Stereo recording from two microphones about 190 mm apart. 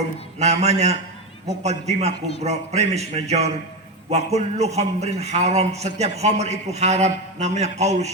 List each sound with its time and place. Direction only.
0.3 s a man's voice: 35° right (ahead or behind)